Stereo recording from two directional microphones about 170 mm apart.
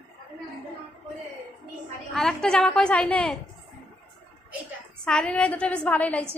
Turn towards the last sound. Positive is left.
turn(degrees=10)  # may be behind; listen again after turning